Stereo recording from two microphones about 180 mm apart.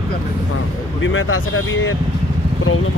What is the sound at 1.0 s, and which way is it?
Speech, 90° left.